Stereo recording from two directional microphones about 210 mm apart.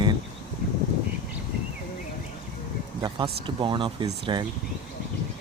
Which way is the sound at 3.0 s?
20° right (ahead or behind).